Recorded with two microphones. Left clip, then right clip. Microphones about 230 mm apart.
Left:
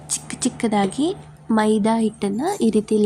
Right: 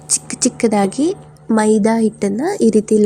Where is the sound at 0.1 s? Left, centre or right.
Centre.